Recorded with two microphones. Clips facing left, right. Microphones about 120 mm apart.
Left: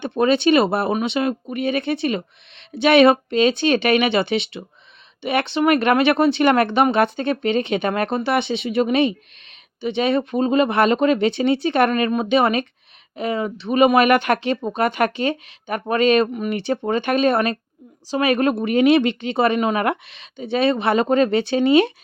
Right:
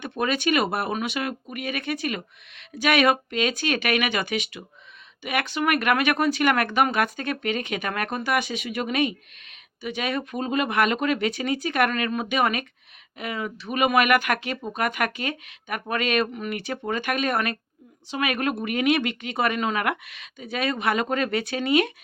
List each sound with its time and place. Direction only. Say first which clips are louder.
0.0 s speech: left 8 dB; 30° left (ahead or behind)